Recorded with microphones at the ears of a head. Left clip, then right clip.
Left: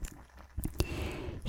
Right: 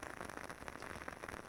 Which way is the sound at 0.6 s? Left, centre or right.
Left.